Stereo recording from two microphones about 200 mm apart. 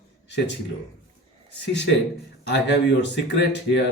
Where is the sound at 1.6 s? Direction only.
60° left (ahead or behind).